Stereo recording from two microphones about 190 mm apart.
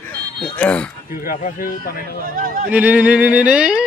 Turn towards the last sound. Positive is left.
turn(degrees=-5)  # may be behind; listen again after turning